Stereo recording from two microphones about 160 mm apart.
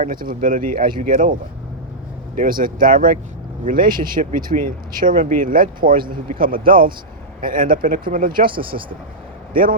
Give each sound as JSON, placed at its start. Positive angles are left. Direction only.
{"t": 0.0, "sound": "speech", "side_deg": -60}
{"t": 9.5, "sound": "speech", "side_deg": -60}